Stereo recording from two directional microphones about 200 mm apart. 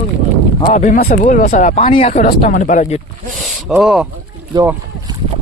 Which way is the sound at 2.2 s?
45° left (ahead or behind).